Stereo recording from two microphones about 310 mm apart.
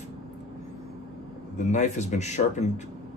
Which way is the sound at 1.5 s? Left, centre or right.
Left.